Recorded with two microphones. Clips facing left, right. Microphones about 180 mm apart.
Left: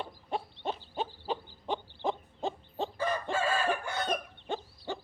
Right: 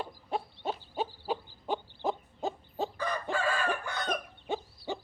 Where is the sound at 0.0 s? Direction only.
Centre (ahead or behind).